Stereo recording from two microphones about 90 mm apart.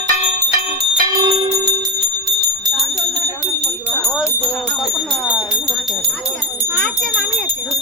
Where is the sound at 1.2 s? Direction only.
55° right (ahead or behind).